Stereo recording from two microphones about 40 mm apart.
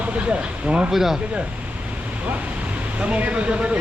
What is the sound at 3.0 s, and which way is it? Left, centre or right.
Speech, right.